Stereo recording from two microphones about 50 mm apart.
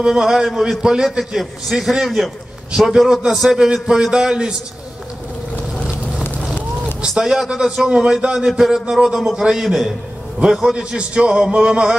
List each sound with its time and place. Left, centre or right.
0.0 s a man's voice: centre
7.0 s a man's voice: centre
8.4 s a man's voice: centre